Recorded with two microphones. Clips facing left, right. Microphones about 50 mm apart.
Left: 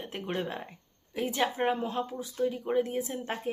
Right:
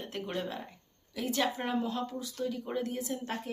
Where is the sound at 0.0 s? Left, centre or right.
Centre.